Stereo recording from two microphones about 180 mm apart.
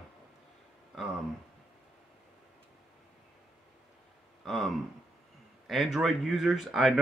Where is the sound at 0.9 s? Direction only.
Centre (ahead or behind).